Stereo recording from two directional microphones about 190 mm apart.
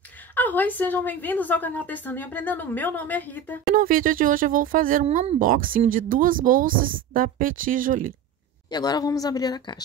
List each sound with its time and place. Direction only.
0.3 s a woman's voice: 10° left (ahead or behind)
3.7 s speech: 45° right (ahead or behind)
5.0 s speech: 35° right (ahead or behind)
8.6 s speech: 20° left (ahead or behind)